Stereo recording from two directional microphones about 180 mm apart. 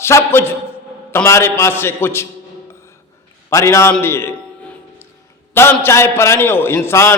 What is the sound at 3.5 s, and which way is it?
Speech, 15° left (ahead or behind).